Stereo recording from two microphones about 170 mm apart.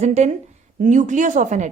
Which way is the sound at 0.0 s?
40° right (ahead or behind).